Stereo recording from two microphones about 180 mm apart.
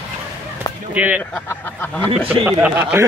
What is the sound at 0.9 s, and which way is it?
Speech, 10° right (ahead or behind).